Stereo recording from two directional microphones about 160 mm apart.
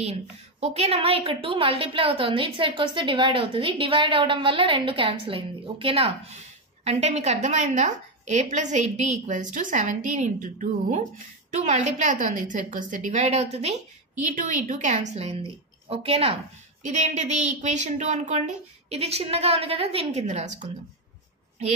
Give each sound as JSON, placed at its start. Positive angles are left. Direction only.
{"t": 0.0, "sound": "a woman's voice", "side_deg": -40}
{"t": 14.3, "sound": "a woman's voice", "side_deg": -55}
{"t": 16.8, "sound": "a woman's voice", "side_deg": -50}